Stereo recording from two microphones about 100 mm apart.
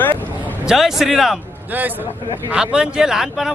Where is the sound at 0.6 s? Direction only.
5° right (ahead or behind).